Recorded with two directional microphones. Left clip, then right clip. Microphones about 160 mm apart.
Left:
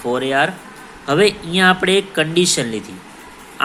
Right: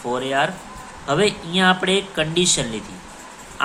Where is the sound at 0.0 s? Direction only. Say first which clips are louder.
Left 4 dB; 20° left (ahead or behind).